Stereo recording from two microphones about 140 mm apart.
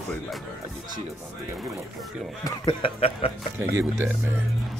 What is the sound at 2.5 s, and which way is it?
Speech, 35° left (ahead or behind).